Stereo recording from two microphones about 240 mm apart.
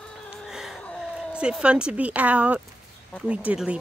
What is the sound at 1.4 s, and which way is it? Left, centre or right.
Speech, centre.